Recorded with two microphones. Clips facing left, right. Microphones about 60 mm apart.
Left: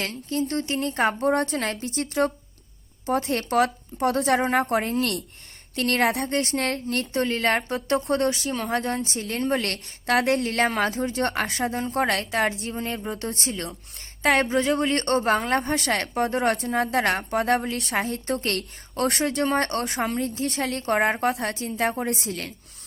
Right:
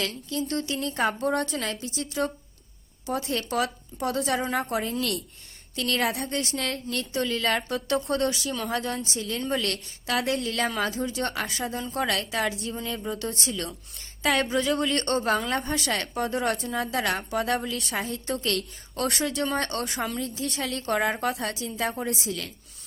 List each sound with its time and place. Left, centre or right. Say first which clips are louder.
0.0 s a woman's voice: left 3 dB; left